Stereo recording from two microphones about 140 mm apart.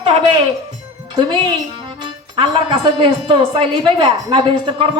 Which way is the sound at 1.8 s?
35° right (ahead or behind).